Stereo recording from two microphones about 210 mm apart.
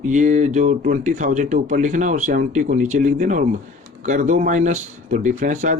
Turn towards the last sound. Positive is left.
turn(degrees=-35)  # may be behind; listen again after turning